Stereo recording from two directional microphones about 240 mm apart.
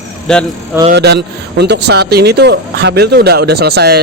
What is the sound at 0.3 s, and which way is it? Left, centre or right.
Speech, centre.